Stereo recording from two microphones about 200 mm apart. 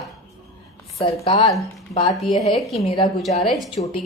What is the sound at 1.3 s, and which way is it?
Speech, 25° left (ahead or behind).